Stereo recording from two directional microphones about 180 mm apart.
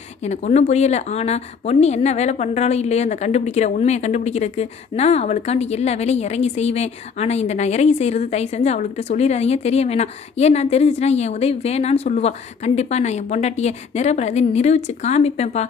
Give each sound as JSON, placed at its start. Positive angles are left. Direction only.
{"t": 0.2, "sound": "a woman's voice", "side_deg": 40}